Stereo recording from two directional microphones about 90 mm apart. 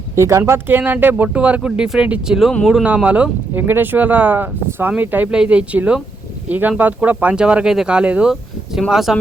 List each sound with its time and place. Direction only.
0.2 s speech: 30° right (ahead or behind); by 9.1 s centre (ahead or behind)